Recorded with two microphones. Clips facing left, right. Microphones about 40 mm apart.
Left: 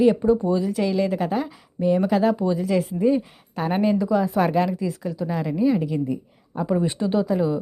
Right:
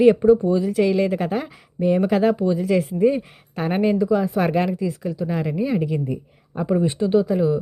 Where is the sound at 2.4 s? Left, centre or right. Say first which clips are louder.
Right 2 dB; centre.